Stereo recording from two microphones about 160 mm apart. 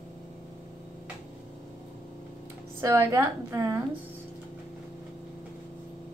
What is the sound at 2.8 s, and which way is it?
A woman's voice, 20° right (ahead or behind).